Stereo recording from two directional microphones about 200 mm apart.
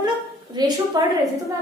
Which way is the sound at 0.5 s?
20° right (ahead or behind).